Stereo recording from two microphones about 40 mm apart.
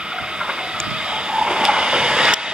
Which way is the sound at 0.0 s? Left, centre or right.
Right.